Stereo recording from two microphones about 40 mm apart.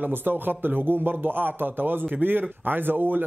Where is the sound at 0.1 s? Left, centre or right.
Right.